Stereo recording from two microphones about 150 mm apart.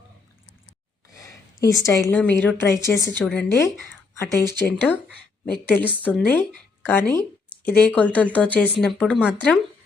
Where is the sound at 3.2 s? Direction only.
10° left (ahead or behind).